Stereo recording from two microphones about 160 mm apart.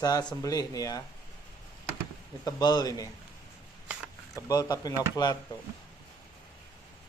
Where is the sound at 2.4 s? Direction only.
25° left (ahead or behind).